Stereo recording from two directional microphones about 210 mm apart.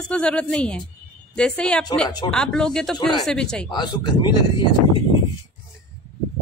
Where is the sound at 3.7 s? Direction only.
20° left (ahead or behind).